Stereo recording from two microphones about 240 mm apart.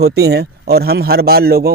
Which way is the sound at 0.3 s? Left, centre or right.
Right.